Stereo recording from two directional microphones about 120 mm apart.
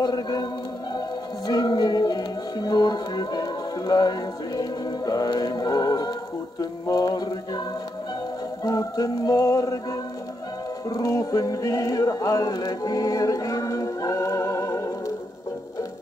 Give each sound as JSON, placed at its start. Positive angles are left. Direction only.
{"t": 0.0, "sound": "speech", "side_deg": 35}
{"t": 1.5, "sound": "music", "side_deg": 35}
{"t": 8.6, "sound": "music", "side_deg": 30}
{"t": 10.9, "sound": "music", "side_deg": 30}